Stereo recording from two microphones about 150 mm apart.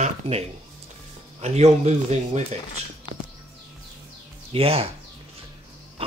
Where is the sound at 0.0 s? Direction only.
45° right (ahead or behind).